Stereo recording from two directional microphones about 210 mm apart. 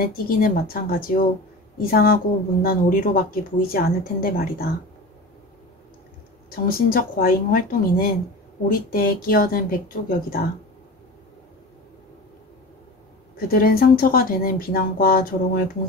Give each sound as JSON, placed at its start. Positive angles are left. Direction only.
{"t": 0.0, "sound": "speech", "side_deg": 45}
{"t": 6.5, "sound": "speech", "side_deg": 45}
{"t": 13.5, "sound": "speech", "side_deg": 45}